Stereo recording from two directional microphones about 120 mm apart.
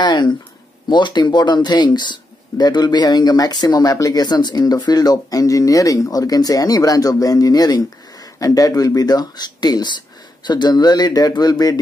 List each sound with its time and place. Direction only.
0.0 s speech: 40° left (ahead or behind)